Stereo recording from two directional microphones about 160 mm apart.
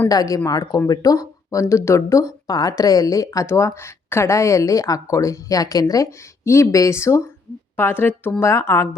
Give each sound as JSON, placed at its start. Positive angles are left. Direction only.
{"t": 0.1, "sound": "speech", "side_deg": 20}